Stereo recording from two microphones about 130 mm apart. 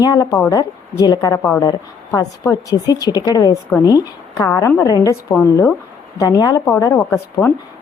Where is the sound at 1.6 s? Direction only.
25° left (ahead or behind).